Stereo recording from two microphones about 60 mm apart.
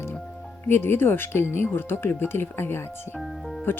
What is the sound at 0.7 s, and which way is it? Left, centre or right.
Speech, left.